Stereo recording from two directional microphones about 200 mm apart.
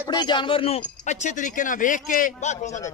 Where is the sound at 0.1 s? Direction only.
20° left (ahead or behind).